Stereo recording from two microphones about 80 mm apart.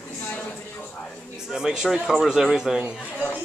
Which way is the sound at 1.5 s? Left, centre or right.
Centre.